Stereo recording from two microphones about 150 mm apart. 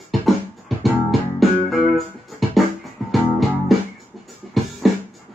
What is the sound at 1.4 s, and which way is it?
Music, centre (ahead or behind).